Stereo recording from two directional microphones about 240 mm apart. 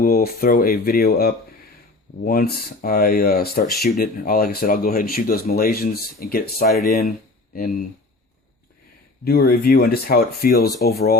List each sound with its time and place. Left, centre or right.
0.0 s speech: left
9.2 s speech: left